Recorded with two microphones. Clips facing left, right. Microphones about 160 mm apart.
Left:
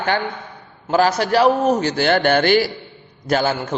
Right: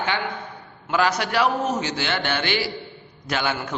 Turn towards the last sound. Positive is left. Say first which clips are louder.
# left 7 dB
turn(degrees=40)  # may be behind; listen again after turning